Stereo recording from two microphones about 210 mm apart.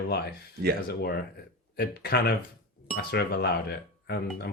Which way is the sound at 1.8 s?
50° left (ahead or behind).